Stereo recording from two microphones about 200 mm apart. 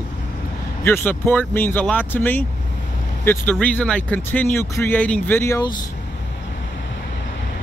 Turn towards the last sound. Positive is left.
turn(degrees=15)  # may be behind; listen again after turning